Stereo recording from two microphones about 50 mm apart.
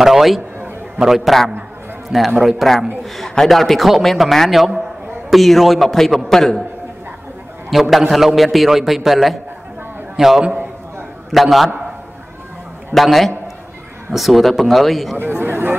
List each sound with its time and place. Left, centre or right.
0.0 s a man's voice: centre
7.7 s a man's voice: centre
12.9 s a man's voice: centre
15.1 s speech: right